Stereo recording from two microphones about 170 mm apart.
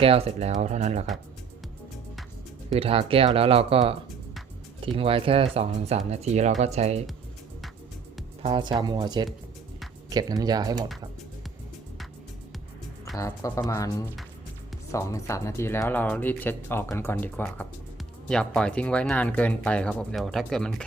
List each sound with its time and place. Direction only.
0.0 s speech: 35° right (ahead or behind)
2.7 s speech: 35° right (ahead or behind)
8.4 s speech: 30° right (ahead or behind)
13.1 s speech: 20° left (ahead or behind)